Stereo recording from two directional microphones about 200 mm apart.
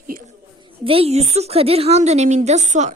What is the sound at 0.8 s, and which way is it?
A woman's voice, 30° right (ahead or behind).